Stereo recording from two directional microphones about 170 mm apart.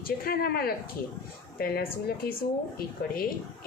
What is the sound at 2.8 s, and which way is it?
Speech, 60° left (ahead or behind).